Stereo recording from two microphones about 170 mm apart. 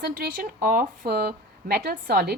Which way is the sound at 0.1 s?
60° right (ahead or behind).